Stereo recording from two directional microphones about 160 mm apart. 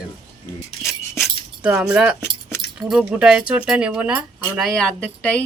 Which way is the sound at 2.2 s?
15° left (ahead or behind).